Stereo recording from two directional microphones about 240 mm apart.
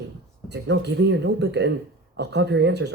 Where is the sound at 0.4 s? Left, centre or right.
Right.